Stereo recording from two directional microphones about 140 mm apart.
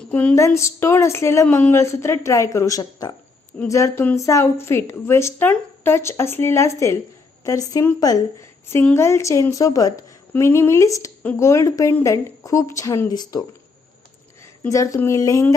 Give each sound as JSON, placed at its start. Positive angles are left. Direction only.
{"t": 0.1, "sound": "a woman's voice", "side_deg": 10}
{"t": 14.7, "sound": "a woman's voice", "side_deg": 20}